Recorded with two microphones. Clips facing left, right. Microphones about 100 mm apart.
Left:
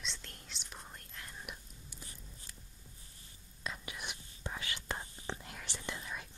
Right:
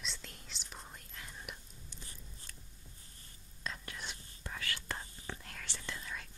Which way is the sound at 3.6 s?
10° left (ahead or behind).